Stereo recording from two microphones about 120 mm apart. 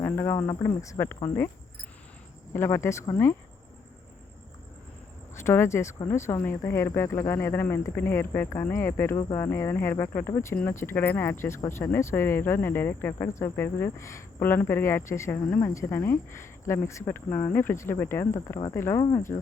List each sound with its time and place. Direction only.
0.0 s speech: 20° left (ahead or behind)
2.5 s speech: 25° left (ahead or behind)
5.4 s speech: 20° left (ahead or behind)